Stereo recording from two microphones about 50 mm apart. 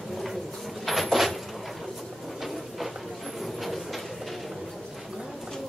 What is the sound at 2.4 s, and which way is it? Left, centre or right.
Train, centre.